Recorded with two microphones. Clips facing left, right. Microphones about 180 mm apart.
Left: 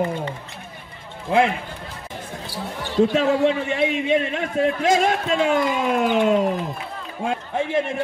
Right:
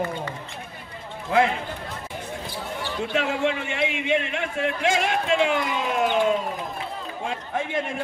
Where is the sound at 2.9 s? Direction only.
35° left (ahead or behind).